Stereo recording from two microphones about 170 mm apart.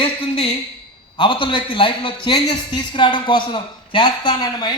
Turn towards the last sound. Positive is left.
turn(degrees=25)  # may be behind; listen again after turning